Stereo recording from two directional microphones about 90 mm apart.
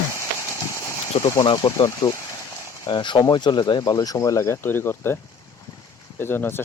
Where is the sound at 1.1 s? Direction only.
90° left.